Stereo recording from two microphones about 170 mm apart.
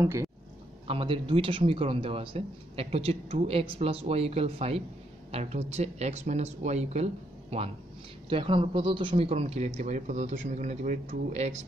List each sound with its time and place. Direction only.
0.0 s speech: 15° right (ahead or behind)
0.8 s a man's voice: 30° right (ahead or behind)
8.3 s a man's voice: 30° right (ahead or behind)